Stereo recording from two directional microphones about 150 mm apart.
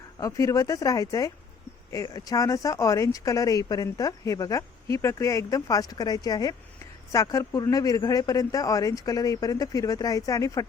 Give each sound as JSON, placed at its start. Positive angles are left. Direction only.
{"t": 0.2, "sound": "speech", "side_deg": 20}